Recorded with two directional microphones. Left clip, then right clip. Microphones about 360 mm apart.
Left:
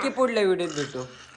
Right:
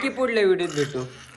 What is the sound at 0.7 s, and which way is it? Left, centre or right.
Speech, centre.